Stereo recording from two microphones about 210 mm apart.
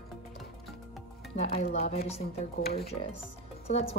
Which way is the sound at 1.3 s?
30° left (ahead or behind).